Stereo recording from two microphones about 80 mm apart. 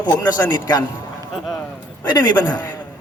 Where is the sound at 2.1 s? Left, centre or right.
Left.